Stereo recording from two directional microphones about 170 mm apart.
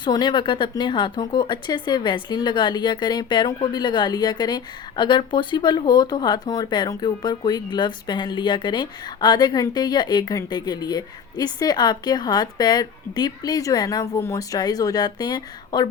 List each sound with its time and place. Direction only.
0.0 s speech: 25° left (ahead or behind)